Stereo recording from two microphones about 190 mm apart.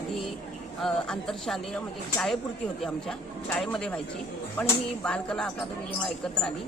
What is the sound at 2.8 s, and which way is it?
Speech, centre (ahead or behind).